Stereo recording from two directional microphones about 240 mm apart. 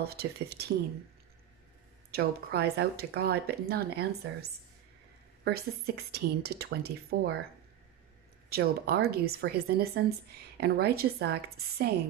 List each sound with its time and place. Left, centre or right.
0.0 s speech: right
2.0 s speech: right
8.5 s speech: right